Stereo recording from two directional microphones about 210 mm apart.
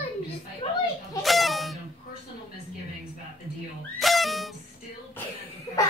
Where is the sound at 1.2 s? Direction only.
Centre (ahead or behind).